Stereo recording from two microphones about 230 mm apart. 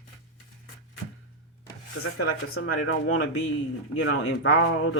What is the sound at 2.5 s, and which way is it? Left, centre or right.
Speech, left.